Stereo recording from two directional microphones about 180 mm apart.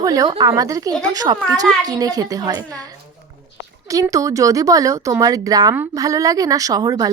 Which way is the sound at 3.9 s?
20° right (ahead or behind).